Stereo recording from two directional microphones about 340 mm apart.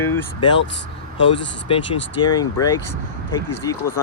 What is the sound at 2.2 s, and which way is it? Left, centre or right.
Speech, centre.